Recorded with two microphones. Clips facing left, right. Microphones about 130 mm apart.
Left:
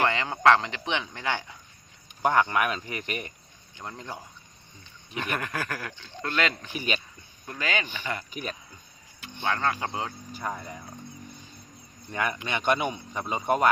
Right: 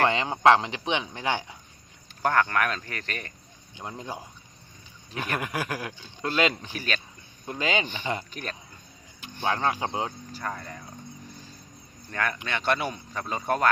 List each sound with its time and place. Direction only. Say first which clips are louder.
0.0 s speech: right 2 dB; 20° right (ahead or behind)
2.2 s speech: left 1 dB; 15° left (ahead or behind)
3.8 s speech: right 2 dB; 15° right (ahead or behind)
6.7 s speech: left 1 dB; 15° left (ahead or behind)
7.4 s speech: right 3 dB; 20° right (ahead or behind)
8.3 s speech: left 2 dB; 10° left (ahead or behind)
9.2 s speech: right 1 dB; 20° right (ahead or behind)
10.3 s speech: left 1 dB; 10° left (ahead or behind)
12.1 s speech: even; 15° left (ahead or behind)